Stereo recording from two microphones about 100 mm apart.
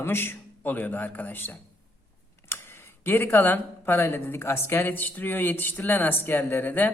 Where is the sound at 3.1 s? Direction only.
20° left (ahead or behind).